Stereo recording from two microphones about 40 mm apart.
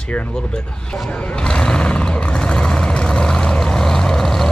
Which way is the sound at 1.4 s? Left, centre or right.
Left.